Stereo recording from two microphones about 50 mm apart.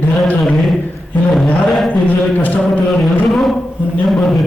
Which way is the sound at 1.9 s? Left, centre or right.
Left.